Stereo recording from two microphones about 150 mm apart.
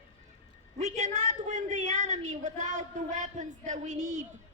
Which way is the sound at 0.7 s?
50° right (ahead or behind).